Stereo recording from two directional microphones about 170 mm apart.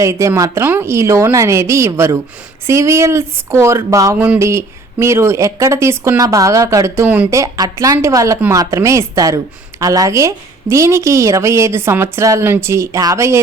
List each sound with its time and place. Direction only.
0.0 s speech: 15° right (ahead or behind)